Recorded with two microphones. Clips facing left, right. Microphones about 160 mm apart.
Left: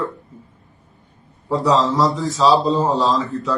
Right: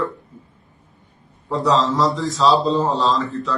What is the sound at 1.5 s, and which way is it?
A man's voice, centre (ahead or behind).